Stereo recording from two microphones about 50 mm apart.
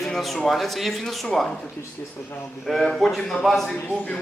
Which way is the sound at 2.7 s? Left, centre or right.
Centre.